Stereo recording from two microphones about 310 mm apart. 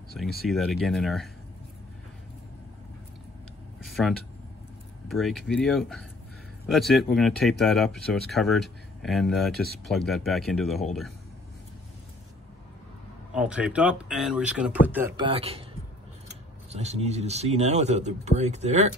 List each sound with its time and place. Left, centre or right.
0.2 s speech: centre
3.8 s a sound: centre
5.0 s speech: centre
13.3 s speech: centre
16.7 s speech: centre